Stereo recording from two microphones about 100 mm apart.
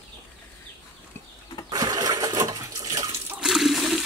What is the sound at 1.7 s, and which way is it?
Water, 40° right (ahead or behind).